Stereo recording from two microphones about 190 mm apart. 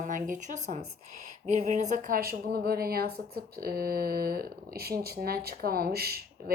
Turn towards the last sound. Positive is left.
turn(degrees=-55)  # may be behind; listen again after turning